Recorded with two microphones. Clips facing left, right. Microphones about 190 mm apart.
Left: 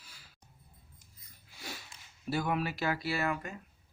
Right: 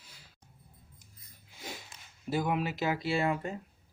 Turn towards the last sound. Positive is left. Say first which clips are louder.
# right 4 dB
turn(degrees=-25)  # may be behind; listen again after turning